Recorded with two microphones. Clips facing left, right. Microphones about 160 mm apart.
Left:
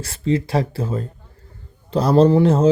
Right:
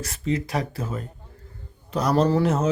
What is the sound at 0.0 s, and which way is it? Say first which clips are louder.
Speech: left 6 dB; 30° left (ahead or behind).